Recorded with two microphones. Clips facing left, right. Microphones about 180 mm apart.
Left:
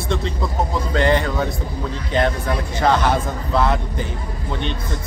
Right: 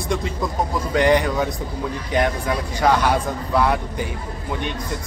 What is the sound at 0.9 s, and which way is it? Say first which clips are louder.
Speech: right 2 dB; 15° right (ahead or behind).